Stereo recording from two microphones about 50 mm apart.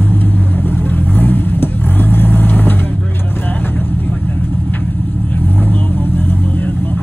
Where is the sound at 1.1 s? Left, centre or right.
Left.